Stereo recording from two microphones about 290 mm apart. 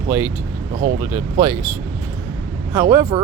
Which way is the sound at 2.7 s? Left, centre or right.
Centre.